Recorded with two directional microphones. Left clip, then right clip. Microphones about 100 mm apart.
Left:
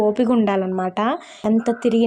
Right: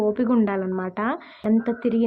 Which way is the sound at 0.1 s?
35° left (ahead or behind).